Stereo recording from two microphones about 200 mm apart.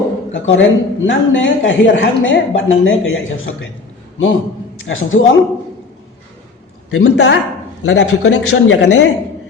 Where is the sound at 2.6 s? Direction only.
80° left.